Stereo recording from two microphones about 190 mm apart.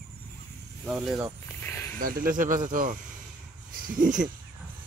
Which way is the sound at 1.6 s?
10° left (ahead or behind).